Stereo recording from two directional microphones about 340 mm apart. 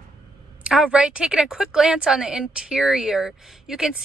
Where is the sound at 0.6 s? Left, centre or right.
Centre.